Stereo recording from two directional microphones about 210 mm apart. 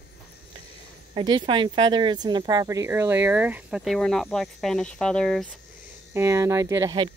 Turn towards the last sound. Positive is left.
turn(degrees=-20)  # may be behind; listen again after turning